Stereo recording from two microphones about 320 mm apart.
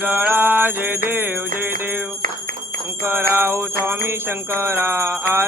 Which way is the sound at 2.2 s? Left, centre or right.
Right.